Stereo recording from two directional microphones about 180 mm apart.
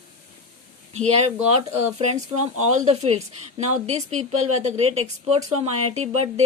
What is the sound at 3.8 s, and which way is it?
A woman's voice, 40° right (ahead or behind).